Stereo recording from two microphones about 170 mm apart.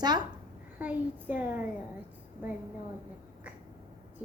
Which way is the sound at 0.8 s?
10° right (ahead or behind).